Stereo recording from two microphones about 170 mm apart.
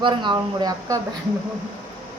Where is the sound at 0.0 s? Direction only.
30° right (ahead or behind).